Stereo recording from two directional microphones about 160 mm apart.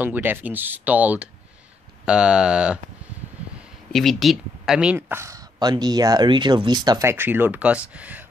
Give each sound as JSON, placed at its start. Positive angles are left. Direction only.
{"t": 0.0, "sound": "speech", "side_deg": -10}
{"t": 3.9, "sound": "speech", "side_deg": 0}
{"t": 4.9, "sound": "speech", "side_deg": -15}